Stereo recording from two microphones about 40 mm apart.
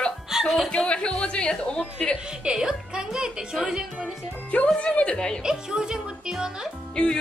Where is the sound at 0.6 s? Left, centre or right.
Left.